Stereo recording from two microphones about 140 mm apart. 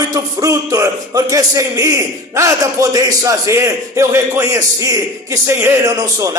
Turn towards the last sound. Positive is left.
turn(degrees=-25)  # may be behind; listen again after turning